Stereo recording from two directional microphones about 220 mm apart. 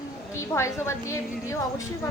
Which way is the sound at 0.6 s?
15° left (ahead or behind).